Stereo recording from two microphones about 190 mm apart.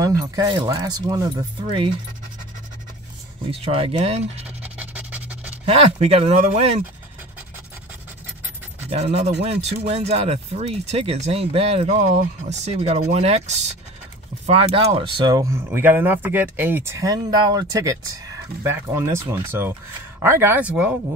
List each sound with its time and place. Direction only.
0.0 s speech: 20° right (ahead or behind)
3.4 s speech: 30° right (ahead or behind)
4.7 s a sound: 10° right (ahead or behind)
5.7 s speech: 35° right (ahead or behind)
8.8 s speech: 30° right (ahead or behind); by 20.9 s 5° right (ahead or behind)